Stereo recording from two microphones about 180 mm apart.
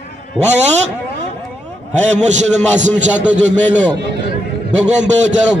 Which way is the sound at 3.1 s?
5° right (ahead or behind).